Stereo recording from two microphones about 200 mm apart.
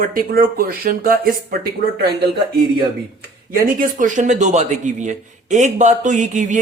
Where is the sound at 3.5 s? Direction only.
40° right (ahead or behind).